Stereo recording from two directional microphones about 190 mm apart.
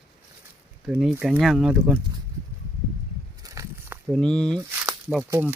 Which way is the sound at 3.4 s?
15° right (ahead or behind).